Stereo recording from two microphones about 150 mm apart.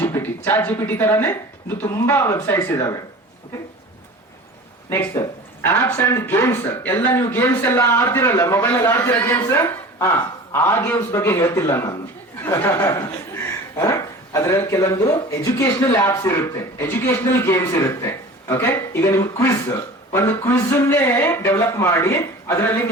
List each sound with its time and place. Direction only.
0.0 s speech: 15° left (ahead or behind)
4.9 s speech: 15° left (ahead or behind)